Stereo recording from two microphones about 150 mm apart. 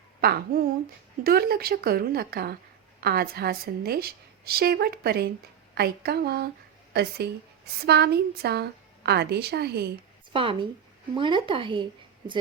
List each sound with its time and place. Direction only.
0.2 s a woman's voice: 90° right
10.3 s speech: 35° right (ahead or behind)